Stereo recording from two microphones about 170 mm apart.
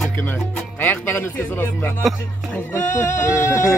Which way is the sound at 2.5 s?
10° left (ahead or behind).